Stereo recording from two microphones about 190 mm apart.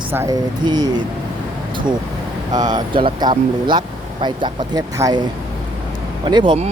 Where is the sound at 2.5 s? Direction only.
20° right (ahead or behind).